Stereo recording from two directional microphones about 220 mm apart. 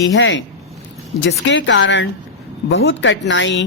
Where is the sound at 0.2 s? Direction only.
60° left (ahead or behind).